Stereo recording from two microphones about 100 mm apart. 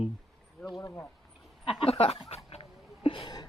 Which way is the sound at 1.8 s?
75° left (ahead or behind).